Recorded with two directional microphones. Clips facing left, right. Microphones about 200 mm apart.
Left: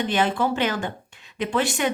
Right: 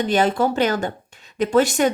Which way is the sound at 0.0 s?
40° right (ahead or behind).